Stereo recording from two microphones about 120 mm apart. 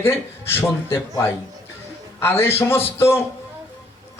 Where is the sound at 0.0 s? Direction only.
20° left (ahead or behind).